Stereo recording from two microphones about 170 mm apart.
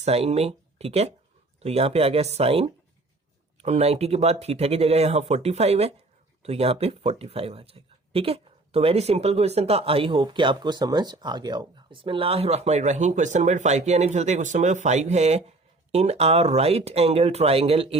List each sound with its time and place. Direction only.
0.0 s speech: 40° right (ahead or behind)